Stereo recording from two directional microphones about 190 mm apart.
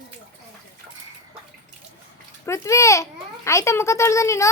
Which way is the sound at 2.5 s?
15° left (ahead or behind).